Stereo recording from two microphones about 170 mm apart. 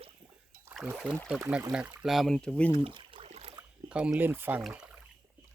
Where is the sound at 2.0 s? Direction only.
Centre (ahead or behind).